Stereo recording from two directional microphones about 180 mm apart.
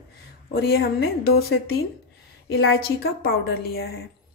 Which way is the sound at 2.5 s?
60° left (ahead or behind).